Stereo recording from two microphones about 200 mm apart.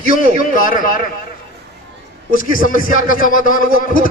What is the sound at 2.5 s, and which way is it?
A man's voice, 45° left (ahead or behind).